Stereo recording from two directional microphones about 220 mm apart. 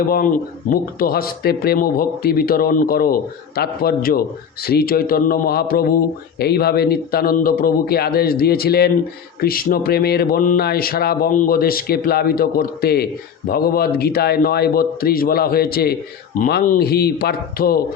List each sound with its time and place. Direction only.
0.0 s speech: 40° left (ahead or behind)